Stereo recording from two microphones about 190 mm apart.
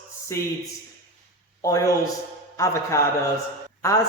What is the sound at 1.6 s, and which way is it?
Speech, 15° left (ahead or behind).